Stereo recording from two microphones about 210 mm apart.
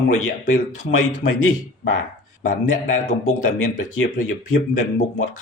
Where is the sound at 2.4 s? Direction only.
35° left (ahead or behind).